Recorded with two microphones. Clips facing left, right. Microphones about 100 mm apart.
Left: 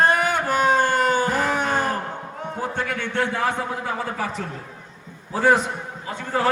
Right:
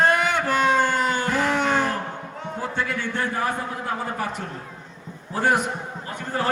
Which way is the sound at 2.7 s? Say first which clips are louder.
Left 1 dB; 55° left (ahead or behind).